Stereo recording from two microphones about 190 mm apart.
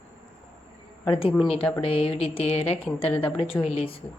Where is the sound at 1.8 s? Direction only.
30° left (ahead or behind).